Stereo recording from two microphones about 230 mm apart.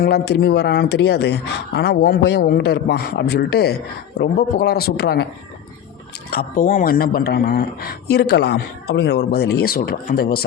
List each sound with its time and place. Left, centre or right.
0.0 s speech: left
6.3 s speech: left